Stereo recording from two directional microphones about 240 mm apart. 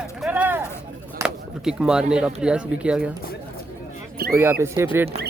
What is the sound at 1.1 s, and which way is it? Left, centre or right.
Speech, centre.